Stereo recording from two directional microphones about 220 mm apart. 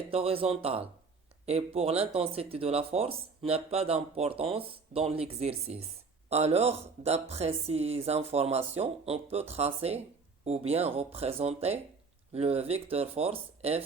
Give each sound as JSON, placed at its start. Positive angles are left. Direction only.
{"t": 0.1, "sound": "speech", "side_deg": -25}